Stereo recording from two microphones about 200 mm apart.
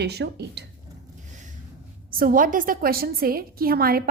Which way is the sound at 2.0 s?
45° right (ahead or behind).